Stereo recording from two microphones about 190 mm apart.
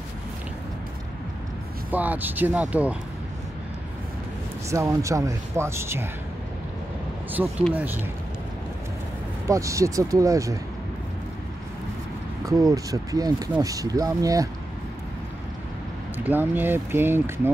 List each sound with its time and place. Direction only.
1.9 s speech: 10° right (ahead or behind)
4.6 s speech: 15° right (ahead or behind)
7.4 s speech: 5° right (ahead or behind)
9.5 s speech: 15° right (ahead or behind)
12.4 s speech: 15° right (ahead or behind)
16.3 s speech: 10° right (ahead or behind)